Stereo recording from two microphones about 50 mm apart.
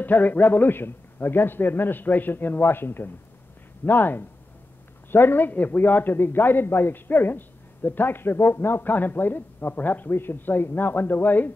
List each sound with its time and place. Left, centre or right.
0.0 s speech: left
8.9 s speech: left